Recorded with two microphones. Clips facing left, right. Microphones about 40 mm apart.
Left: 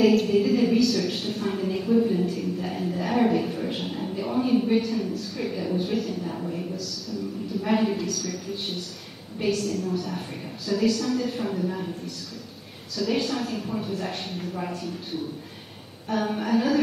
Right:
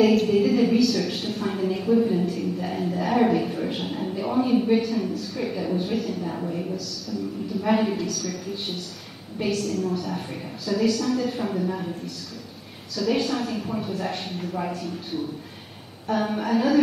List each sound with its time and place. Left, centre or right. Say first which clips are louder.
0.0 s a sound: right 1 dB; centre
7.6 s a woman's voice: right 1 dB; centre
12.9 s a woman's voice: right 2 dB; centre